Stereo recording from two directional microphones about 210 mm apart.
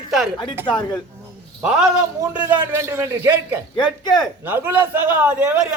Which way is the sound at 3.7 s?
20° left (ahead or behind).